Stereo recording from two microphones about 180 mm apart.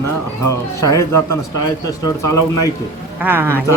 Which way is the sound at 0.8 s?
15° left (ahead or behind).